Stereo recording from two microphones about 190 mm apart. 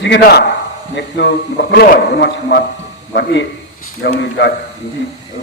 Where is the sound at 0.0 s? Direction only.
60° left (ahead or behind).